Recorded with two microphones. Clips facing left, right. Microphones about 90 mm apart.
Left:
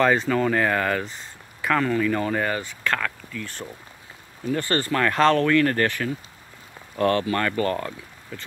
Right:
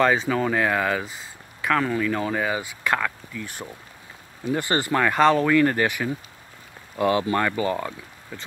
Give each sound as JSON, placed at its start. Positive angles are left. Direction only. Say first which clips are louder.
{"t": 0.0, "sound": "speech", "louder": "left 1 dB", "side_deg": 0}